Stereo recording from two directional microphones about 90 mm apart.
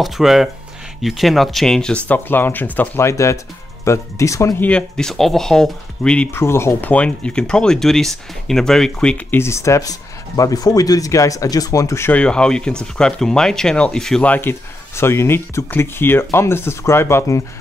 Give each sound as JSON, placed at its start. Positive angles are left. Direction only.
{"t": 0.0, "sound": "speech", "side_deg": -5}
{"t": 3.0, "sound": "speech", "side_deg": 30}
{"t": 4.6, "sound": "speech", "side_deg": 15}
{"t": 6.3, "sound": "speech", "side_deg": 30}
{"t": 6.9, "sound": "speech", "side_deg": 15}
{"t": 9.3, "sound": "speech", "side_deg": 30}
{"t": 12.1, "sound": "speech", "side_deg": 10}
{"t": 14.3, "sound": "speech", "side_deg": 25}